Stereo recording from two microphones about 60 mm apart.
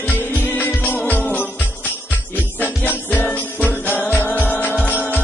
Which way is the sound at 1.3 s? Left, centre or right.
Left.